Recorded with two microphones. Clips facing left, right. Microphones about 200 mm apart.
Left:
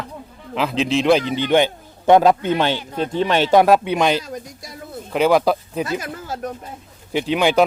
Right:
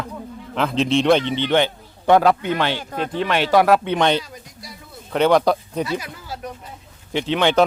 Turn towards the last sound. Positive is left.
turn(degrees=10)  # may be behind; listen again after turning